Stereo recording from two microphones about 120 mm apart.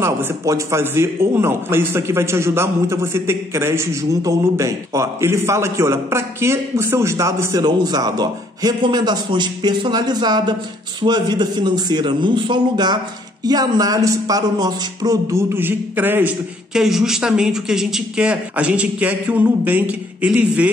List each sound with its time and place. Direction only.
0.0 s a man's voice: 25° right (ahead or behind)
15.5 s speech: 15° right (ahead or behind)
16.7 s speech: 5° right (ahead or behind)